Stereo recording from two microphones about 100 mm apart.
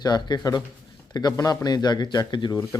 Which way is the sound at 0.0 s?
45° left (ahead or behind).